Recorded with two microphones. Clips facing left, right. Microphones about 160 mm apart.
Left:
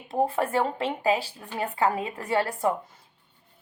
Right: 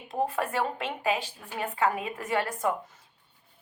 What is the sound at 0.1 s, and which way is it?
Speech, 30° left (ahead or behind).